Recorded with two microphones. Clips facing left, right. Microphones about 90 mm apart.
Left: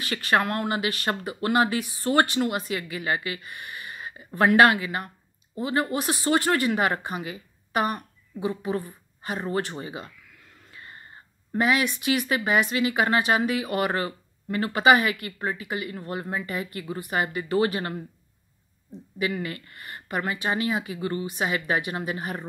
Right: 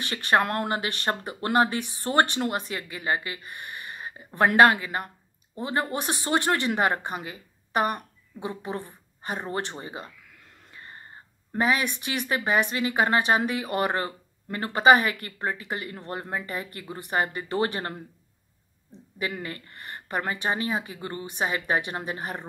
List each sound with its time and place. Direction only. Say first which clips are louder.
0.1 s speech: even; 30° right (ahead or behind)
4.6 s speech: right 2 dB; 35° right (ahead or behind)
8.6 s a woman's voice: left 4 dB; 25° right (ahead or behind)
10.7 s a sound: even; 30° right (ahead or behind)
11.5 s speech: left 2 dB; 35° right (ahead or behind)
19.1 s speech: left 4 dB; 35° right (ahead or behind)